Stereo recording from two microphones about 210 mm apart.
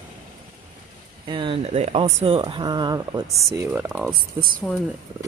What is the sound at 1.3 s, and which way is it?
Speech, 25° right (ahead or behind).